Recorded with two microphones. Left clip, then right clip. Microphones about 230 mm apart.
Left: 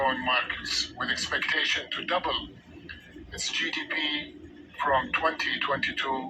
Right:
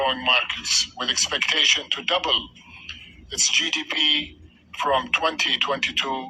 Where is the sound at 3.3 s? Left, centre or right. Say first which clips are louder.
Right 8 dB; right.